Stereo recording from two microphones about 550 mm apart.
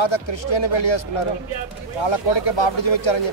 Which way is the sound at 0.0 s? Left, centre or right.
Left.